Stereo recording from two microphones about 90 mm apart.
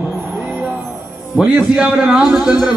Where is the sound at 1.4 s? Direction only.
10° right (ahead or behind).